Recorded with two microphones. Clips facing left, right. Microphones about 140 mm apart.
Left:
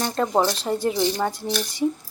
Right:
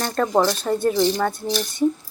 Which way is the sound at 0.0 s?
20° left (ahead or behind).